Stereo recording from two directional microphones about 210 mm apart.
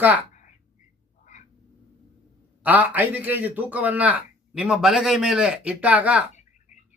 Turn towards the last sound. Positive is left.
turn(degrees=-5)  # may be behind; listen again after turning